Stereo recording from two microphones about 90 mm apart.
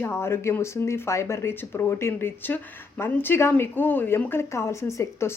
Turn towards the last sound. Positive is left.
turn(degrees=30)  # may be behind; listen again after turning